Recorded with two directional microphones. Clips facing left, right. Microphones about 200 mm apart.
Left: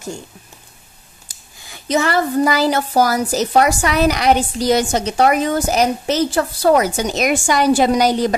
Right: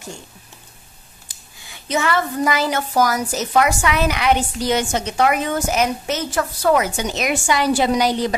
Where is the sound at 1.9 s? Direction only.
35° left (ahead or behind).